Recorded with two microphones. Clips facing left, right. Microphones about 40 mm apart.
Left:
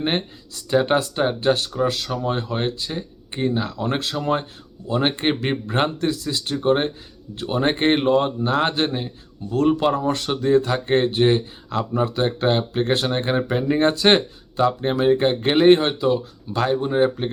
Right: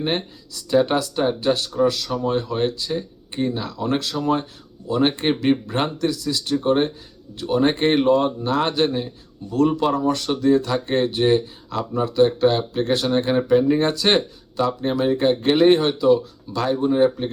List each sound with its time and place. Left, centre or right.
0.0 s speech: left
13.3 s speech: centre